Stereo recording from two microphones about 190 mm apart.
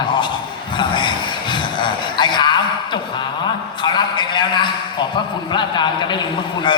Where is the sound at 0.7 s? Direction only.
25° left (ahead or behind).